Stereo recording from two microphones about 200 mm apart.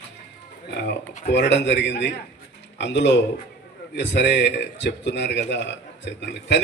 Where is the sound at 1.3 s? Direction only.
60° left (ahead or behind).